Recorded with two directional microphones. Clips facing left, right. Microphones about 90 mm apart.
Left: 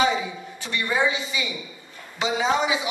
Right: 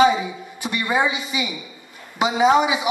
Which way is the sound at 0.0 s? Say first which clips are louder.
Right 6 dB; 15° right (ahead or behind).